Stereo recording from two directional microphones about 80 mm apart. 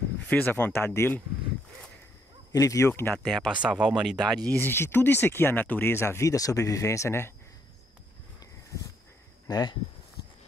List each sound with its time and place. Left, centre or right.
0.3 s speech: left
2.5 s speech: left
2.9 s speech: left
3.2 s speech: centre
3.6 s speech: centre
4.5 s speech: left
9.5 s speech: left